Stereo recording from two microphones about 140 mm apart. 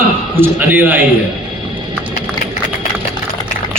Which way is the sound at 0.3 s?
15° right (ahead or behind).